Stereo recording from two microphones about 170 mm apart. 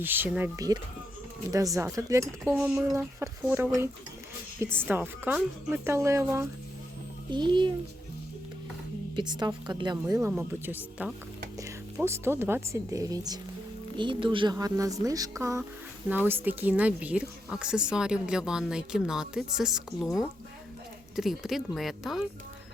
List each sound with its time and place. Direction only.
0.0 s speech: 10° right (ahead or behind)
2.4 s speech: centre (ahead or behind)
2.9 s speech: 15° right (ahead or behind)
7.3 s speech: 25° right (ahead or behind)
9.1 s a woman's voice: 25° right (ahead or behind); by 20.1 s centre (ahead or behind)
21.2 s speech: centre (ahead or behind)